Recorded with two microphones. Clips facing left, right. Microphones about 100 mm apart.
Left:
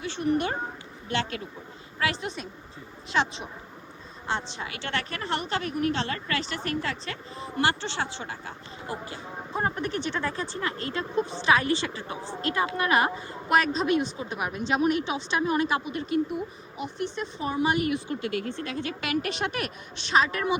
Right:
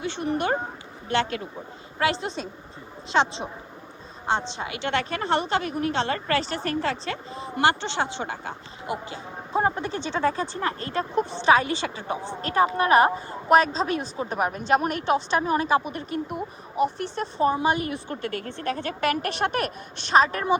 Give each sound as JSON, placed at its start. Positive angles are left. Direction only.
{"t": 0.2, "sound": "a woman's voice", "side_deg": -30}
{"t": 2.0, "sound": "a woman's voice", "side_deg": -30}
{"t": 10.6, "sound": "a woman's voice", "side_deg": -35}
{"t": 15.4, "sound": "a woman's voice", "side_deg": -35}
{"t": 15.8, "sound": "a woman's voice", "side_deg": -45}